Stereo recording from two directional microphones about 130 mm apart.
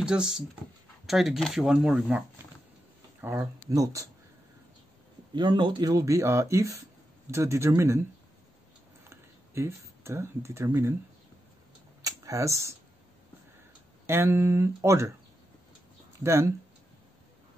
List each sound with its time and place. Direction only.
0.0 s speech: 5° right (ahead or behind)
3.2 s speech: 20° right (ahead or behind)
5.3 s speech: 35° right (ahead or behind); by 8.0 s 20° right (ahead or behind)
9.1 s speech: 20° right (ahead or behind)
12.0 s speech: 25° right (ahead or behind)
14.0 s speech: 20° right (ahead or behind)
16.2 s speech: 20° right (ahead or behind)